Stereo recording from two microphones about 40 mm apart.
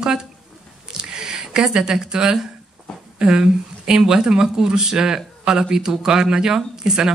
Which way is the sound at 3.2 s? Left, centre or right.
Right.